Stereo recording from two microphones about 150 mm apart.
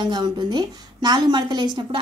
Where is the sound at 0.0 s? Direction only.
30° right (ahead or behind).